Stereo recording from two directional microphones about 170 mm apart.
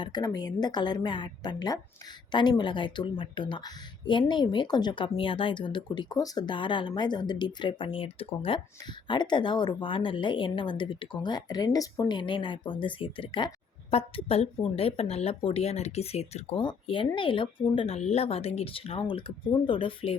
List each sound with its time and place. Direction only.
0.0 s a woman's voice: 25° left (ahead or behind)